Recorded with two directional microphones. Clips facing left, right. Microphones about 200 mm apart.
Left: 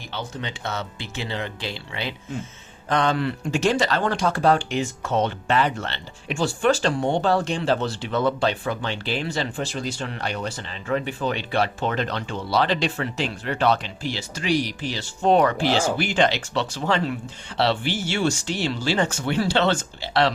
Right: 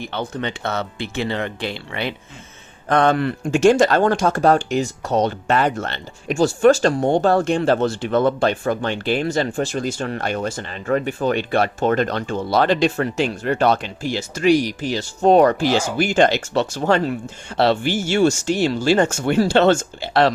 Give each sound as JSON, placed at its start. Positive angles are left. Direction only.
{"t": 0.0, "sound": "speech", "side_deg": -55}